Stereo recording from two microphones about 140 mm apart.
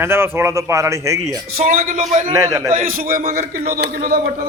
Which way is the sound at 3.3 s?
60° right (ahead or behind).